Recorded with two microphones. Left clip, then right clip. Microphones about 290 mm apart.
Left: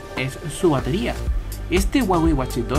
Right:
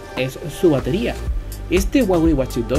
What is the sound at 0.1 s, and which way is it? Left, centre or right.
Speech, centre.